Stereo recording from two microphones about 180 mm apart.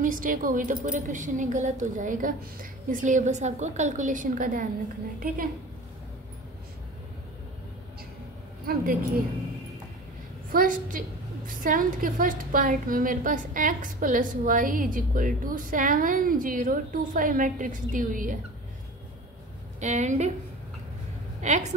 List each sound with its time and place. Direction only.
0.0 s a woman's voice: 50° right (ahead or behind)
8.6 s speech: 55° right (ahead or behind)
10.5 s a woman's voice: 50° right (ahead or behind)
19.8 s a woman's voice: 40° right (ahead or behind)
21.4 s a woman's voice: 40° right (ahead or behind)